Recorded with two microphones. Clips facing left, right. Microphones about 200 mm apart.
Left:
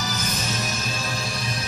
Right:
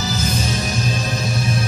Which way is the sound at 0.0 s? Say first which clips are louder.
Right 6 dB; 30° right (ahead or behind).